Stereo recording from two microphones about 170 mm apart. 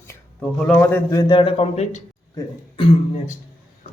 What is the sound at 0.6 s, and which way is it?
A man's voice, 10° left (ahead or behind).